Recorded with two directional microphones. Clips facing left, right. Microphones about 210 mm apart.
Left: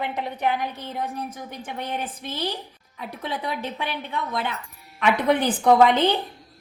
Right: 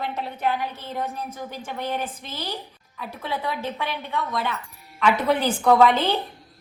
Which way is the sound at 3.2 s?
15° left (ahead or behind).